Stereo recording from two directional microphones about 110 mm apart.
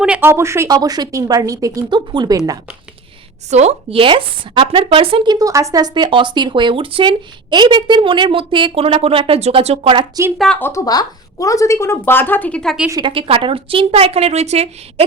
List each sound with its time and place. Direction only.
0.0 s speech: 10° right (ahead or behind)
0.3 s speech: 25° right (ahead or behind)
0.8 s a woman's voice: 35° right (ahead or behind)
3.5 s a woman's voice: 85° right; by 5.3 s 55° right (ahead or behind)
5.3 s speech: 30° right (ahead or behind); by 10.1 s 50° right (ahead or behind)
10.3 s speech: centre (ahead or behind)
10.6 s a woman's voice: 30° left (ahead or behind); by 12.7 s 10° left (ahead or behind)
13.1 s a woman's voice: 55° right (ahead or behind); by 15.0 s 75° right (ahead or behind)